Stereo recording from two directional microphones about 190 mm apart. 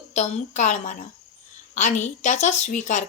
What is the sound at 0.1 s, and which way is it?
A woman's voice, 40° left (ahead or behind).